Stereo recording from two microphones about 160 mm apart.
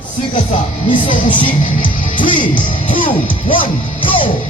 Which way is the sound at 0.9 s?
30° left (ahead or behind).